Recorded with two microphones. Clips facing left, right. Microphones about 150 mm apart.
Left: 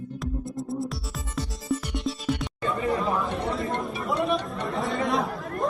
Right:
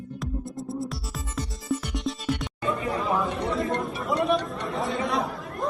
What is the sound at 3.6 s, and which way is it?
Chatter, centre (ahead or behind).